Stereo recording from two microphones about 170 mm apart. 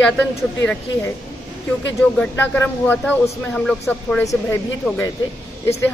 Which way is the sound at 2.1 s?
10° left (ahead or behind).